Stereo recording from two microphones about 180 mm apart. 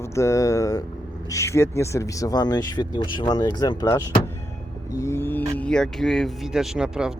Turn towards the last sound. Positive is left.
turn(degrees=-5)  # may be behind; listen again after turning